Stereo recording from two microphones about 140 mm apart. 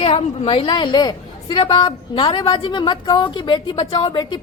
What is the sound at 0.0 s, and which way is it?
A woman's voice, 45° left (ahead or behind).